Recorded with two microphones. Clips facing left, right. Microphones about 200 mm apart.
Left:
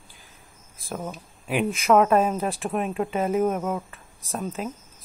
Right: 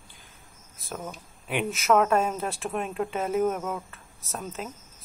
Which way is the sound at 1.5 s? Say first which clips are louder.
Left 3 dB; centre (ahead or behind).